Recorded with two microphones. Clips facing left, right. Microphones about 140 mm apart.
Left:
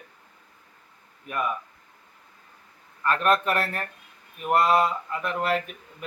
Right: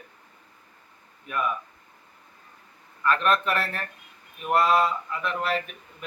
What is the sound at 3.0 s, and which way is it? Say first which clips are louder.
Speech: left 1 dB; 40° left (ahead or behind).